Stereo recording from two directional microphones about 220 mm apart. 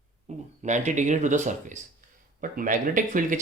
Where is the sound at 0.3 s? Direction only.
30° right (ahead or behind).